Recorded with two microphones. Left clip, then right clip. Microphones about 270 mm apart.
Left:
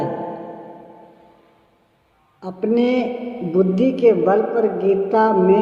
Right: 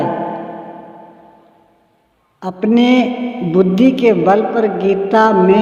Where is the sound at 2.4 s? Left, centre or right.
Right.